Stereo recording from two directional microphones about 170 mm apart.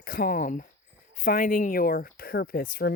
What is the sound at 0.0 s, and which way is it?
Speech, 55° left (ahead or behind).